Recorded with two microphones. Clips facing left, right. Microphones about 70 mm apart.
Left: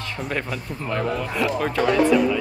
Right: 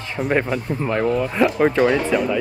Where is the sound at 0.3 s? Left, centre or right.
Right.